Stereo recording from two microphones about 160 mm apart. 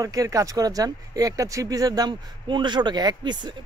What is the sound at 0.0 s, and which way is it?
Speech, 20° right (ahead or behind).